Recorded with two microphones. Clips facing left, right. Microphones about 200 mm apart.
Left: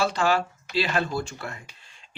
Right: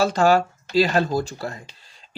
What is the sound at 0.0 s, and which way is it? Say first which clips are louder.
Speech: right 6 dB; 40° right (ahead or behind).